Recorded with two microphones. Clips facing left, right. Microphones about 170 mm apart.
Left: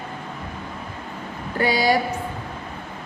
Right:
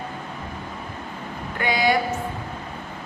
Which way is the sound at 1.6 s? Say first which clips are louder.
Left 2 dB; 35° left (ahead or behind).